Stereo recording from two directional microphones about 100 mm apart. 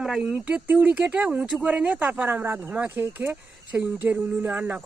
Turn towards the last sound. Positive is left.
turn(degrees=-15)  # may be behind; listen again after turning